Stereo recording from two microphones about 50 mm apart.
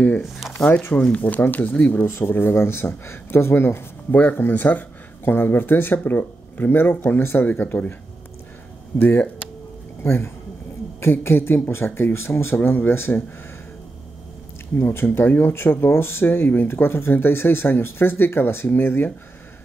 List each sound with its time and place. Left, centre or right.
0.9 s speech: left
1.4 s speech: left
2.0 s speech: left
2.3 s speech: left
4.1 s speech: left
8.9 s speech: left
10.0 s speech: left
12.5 s speech: left
14.8 s speech: left
15.0 s speech: left